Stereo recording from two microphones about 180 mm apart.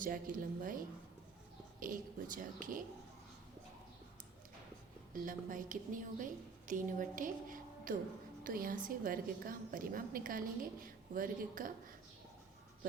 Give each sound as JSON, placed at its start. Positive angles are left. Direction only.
{"t": 0.0, "sound": "a woman's voice", "side_deg": -50}
{"t": 5.1, "sound": "a woman's voice", "side_deg": -45}